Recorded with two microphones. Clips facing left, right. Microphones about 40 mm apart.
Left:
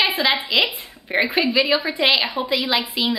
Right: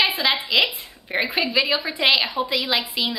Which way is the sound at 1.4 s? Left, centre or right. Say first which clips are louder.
Left 2 dB; centre.